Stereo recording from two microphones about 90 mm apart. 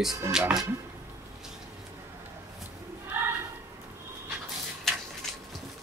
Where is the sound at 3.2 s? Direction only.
20° right (ahead or behind).